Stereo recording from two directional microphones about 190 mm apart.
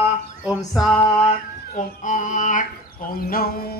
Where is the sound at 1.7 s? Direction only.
40° left (ahead or behind).